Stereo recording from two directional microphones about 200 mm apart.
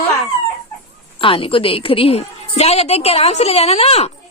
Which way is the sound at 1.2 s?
25° left (ahead or behind).